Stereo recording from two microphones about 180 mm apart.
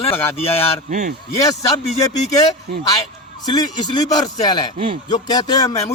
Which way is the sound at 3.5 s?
25° left (ahead or behind).